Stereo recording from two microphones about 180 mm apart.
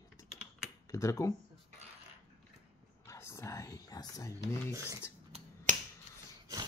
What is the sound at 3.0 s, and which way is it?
Whispering, 15° left (ahead or behind).